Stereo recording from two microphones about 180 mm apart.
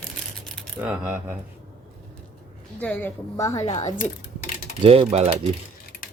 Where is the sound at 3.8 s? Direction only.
45° left (ahead or behind).